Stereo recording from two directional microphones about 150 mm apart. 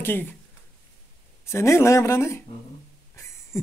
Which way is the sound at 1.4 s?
20° left (ahead or behind).